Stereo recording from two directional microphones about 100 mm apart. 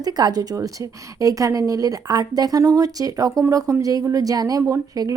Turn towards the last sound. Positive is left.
turn(degrees=-35)  # may be behind; listen again after turning